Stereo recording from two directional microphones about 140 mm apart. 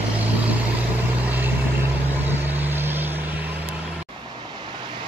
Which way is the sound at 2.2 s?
15° right (ahead or behind).